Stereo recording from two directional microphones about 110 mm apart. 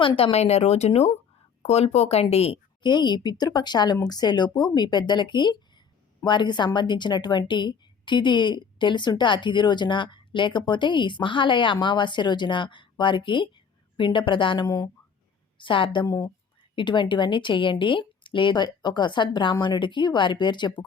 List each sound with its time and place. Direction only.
0.0 s speech: 65° left (ahead or behind)
2.8 s a woman's voice: 45° left (ahead or behind)
15.5 s a woman's voice: 50° left (ahead or behind)
16.0 s speech: 30° left (ahead or behind)
16.7 s a woman's voice: 45° left (ahead or behind)